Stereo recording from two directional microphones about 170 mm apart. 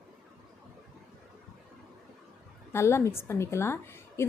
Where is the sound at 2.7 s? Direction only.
15° left (ahead or behind).